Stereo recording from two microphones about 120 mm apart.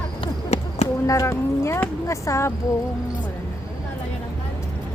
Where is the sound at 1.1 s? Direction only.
25° left (ahead or behind).